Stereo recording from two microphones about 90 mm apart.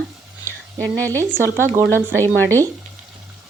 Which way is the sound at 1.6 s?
30° right (ahead or behind).